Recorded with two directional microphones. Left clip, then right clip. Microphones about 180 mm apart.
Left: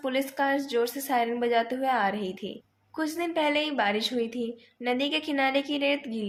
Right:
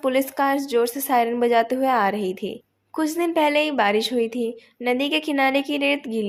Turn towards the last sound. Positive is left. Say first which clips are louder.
# right 5 dB
turn(degrees=-35)  # may be behind; listen again after turning